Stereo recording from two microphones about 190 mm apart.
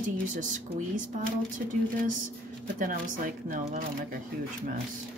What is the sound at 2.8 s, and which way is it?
Speech, 45° right (ahead or behind).